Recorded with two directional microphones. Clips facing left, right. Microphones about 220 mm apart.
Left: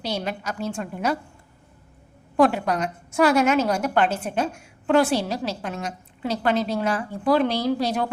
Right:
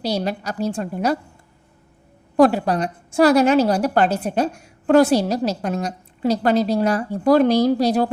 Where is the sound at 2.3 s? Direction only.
35° right (ahead or behind).